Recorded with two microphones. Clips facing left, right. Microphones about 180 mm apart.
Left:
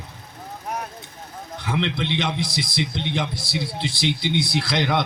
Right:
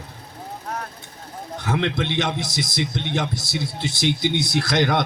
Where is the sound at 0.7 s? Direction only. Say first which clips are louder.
Left 1 dB; 15° left (ahead or behind).